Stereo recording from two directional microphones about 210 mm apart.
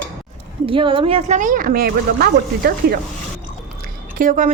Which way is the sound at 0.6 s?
25° right (ahead or behind).